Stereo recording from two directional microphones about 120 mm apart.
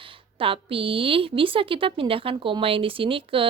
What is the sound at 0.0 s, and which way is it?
A woman's voice, 50° right (ahead or behind).